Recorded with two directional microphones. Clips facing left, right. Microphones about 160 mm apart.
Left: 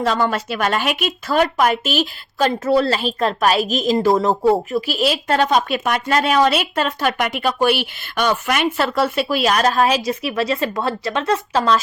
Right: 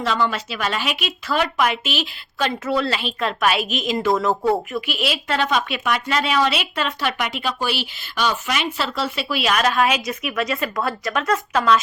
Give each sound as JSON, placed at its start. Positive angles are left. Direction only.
{"t": 0.0, "sound": "a woman's voice", "side_deg": 45}
{"t": 4.4, "sound": "speech", "side_deg": 20}
{"t": 4.9, "sound": "a woman's voice", "side_deg": 40}